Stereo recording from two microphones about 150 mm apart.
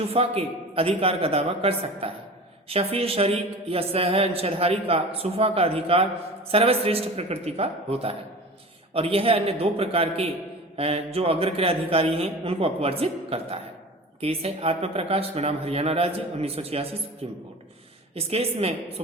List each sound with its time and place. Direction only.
0.0 s a man's voice: 40° right (ahead or behind)
18.1 s a woman's voice: 40° right (ahead or behind)